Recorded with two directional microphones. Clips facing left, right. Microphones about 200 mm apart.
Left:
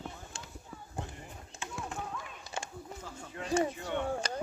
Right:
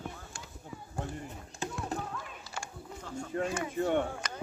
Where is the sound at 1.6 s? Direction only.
40° right (ahead or behind).